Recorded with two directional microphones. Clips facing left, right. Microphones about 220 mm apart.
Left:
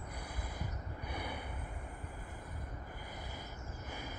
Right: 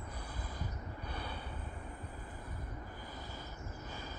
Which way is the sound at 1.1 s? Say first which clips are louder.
Left 3 dB; 15° left (ahead or behind).